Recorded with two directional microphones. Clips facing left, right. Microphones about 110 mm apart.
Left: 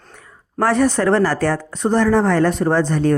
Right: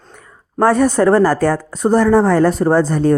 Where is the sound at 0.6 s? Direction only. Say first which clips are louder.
Right 4 dB; 45° right (ahead or behind).